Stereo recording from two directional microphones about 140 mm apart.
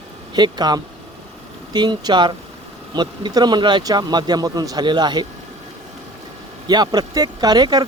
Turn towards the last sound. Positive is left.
turn(degrees=-30)  # may be behind; listen again after turning